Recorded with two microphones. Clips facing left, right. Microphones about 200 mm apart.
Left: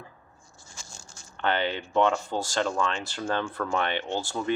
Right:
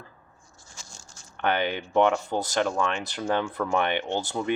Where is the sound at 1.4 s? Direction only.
15° right (ahead or behind).